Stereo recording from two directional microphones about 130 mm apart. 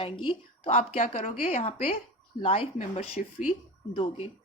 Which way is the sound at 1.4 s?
50° left (ahead or behind).